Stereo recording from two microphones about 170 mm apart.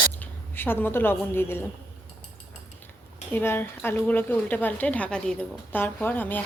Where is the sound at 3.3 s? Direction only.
10° left (ahead or behind).